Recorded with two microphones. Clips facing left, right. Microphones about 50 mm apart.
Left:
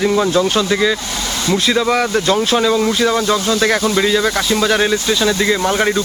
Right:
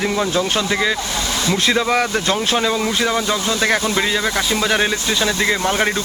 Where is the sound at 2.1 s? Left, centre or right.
Right.